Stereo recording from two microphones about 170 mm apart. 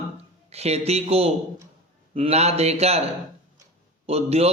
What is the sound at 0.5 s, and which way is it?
A man's voice, 40° right (ahead or behind).